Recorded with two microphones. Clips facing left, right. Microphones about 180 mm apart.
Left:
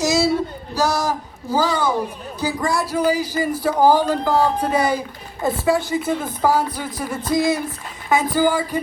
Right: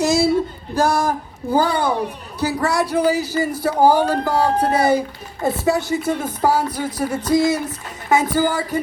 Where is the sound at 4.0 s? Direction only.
70° right (ahead or behind).